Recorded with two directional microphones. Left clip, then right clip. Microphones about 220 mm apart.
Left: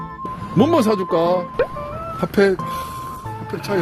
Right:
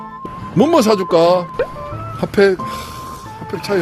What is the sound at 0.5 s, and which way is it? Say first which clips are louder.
Speech: right 4 dB; 15° right (ahead or behind).